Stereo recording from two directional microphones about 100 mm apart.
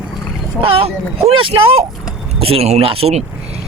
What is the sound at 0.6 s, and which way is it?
Speech, 70° right (ahead or behind).